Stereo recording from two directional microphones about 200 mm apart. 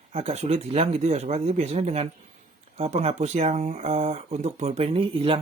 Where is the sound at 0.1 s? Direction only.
30° right (ahead or behind).